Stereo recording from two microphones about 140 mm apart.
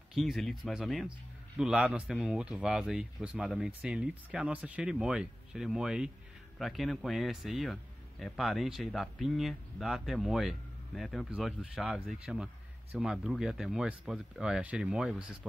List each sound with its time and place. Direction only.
0.1 s a man's voice: centre (ahead or behind)